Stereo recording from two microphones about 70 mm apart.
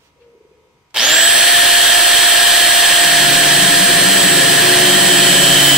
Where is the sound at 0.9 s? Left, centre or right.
Centre.